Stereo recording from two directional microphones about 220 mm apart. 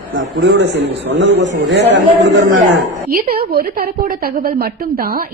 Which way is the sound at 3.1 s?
45° right (ahead or behind).